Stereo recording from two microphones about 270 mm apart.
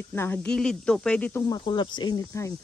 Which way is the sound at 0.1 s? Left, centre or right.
Centre.